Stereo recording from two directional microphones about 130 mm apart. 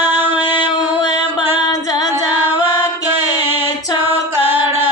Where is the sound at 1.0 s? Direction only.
35° left (ahead or behind).